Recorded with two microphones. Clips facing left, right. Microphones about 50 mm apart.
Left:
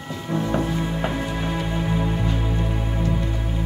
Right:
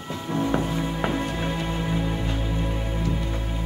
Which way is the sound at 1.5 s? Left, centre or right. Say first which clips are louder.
Left 2 dB; centre.